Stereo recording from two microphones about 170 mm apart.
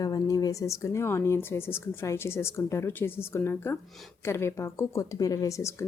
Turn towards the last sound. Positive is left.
turn(degrees=15)  # may be behind; listen again after turning